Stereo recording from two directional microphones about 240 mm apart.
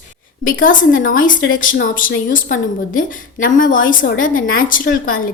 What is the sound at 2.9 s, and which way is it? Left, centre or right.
A woman's voice, left.